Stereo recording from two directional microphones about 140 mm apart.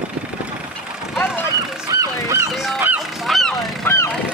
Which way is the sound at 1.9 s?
25° right (ahead or behind).